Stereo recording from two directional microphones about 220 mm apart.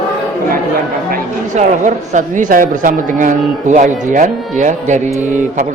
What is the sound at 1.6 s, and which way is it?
Speech, 35° right (ahead or behind).